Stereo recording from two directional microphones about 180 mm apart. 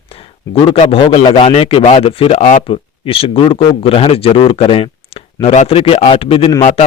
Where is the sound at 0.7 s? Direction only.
30° left (ahead or behind).